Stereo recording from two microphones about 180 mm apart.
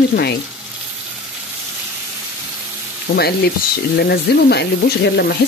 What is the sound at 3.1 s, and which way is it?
Speech, 60° left (ahead or behind).